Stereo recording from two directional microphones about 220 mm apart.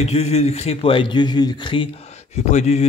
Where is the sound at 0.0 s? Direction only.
30° left (ahead or behind).